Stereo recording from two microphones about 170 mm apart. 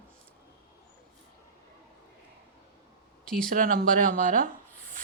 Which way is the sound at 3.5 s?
55° right (ahead or behind).